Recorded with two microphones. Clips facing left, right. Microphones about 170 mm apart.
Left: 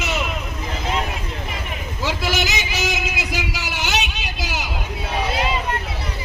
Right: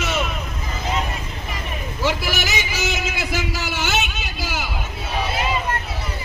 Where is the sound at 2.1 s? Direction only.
20° left (ahead or behind).